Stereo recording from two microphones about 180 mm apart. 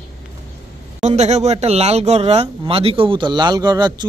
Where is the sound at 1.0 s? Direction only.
40° right (ahead or behind); by 4.0 s 25° right (ahead or behind).